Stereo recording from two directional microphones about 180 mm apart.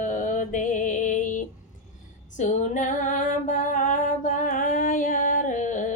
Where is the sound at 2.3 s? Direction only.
40° left (ahead or behind).